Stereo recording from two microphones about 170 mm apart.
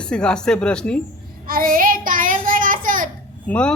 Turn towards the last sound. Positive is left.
turn(degrees=5)  # may be behind; listen again after turning